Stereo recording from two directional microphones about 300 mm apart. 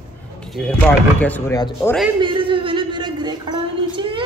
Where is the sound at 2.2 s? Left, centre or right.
Centre.